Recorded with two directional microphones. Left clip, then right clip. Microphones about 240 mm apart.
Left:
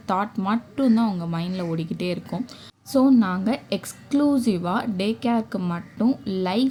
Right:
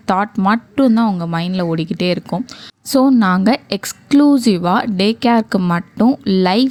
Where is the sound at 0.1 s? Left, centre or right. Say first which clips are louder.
Right 9 dB; right.